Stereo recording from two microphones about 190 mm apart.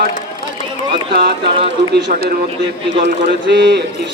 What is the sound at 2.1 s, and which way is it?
Speech, 45° right (ahead or behind).